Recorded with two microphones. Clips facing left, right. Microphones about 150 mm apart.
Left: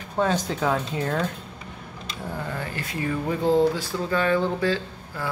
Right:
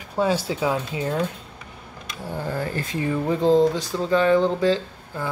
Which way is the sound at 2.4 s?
35° right (ahead or behind).